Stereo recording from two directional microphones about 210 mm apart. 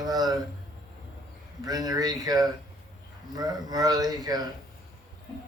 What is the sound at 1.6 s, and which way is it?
Speech, 20° right (ahead or behind).